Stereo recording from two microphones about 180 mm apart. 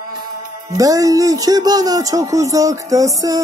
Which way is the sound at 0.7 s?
20° right (ahead or behind).